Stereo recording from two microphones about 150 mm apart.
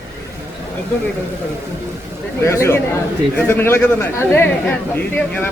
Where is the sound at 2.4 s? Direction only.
20° left (ahead or behind).